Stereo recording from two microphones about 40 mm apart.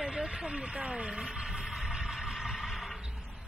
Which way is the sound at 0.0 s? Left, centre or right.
Centre.